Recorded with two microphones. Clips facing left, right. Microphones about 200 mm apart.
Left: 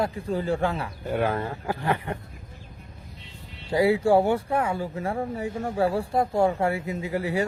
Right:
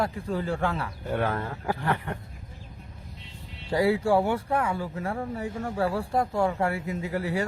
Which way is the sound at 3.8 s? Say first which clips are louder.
Left 3 dB; 20° left (ahead or behind).